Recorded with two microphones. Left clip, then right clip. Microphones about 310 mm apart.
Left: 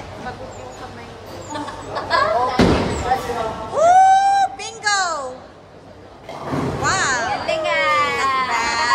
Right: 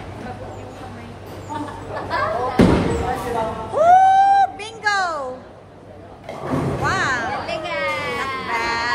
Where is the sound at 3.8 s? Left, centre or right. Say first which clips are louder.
Even; centre.